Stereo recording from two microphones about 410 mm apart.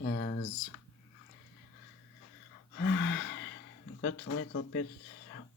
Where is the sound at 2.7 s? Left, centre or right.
Left.